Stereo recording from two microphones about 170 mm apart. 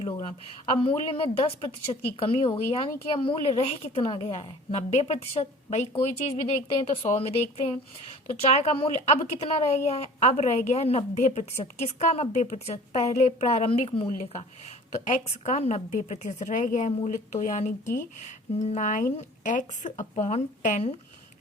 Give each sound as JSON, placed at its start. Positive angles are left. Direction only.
{"t": 0.0, "sound": "speech", "side_deg": 35}
{"t": 15.0, "sound": "a woman's voice", "side_deg": 45}